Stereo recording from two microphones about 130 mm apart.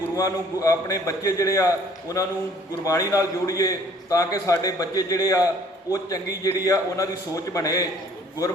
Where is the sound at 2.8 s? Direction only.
25° left (ahead or behind).